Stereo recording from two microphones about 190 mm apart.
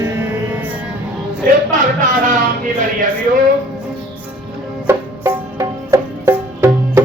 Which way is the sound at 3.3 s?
45° right (ahead or behind).